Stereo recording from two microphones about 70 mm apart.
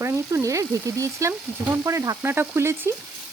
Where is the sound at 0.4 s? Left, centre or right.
Right.